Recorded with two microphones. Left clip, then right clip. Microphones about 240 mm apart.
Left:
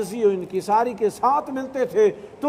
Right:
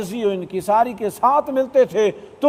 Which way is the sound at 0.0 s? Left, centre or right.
Right.